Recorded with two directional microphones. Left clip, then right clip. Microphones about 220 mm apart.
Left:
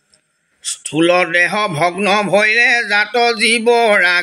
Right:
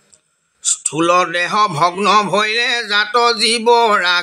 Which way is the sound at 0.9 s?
15° right (ahead or behind).